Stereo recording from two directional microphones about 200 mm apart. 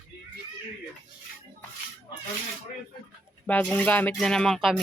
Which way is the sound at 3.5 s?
5° left (ahead or behind).